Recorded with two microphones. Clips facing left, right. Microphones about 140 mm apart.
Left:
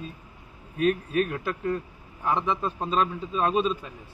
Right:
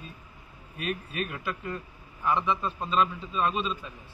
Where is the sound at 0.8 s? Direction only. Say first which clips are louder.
Left 9 dB; 35° left (ahead or behind).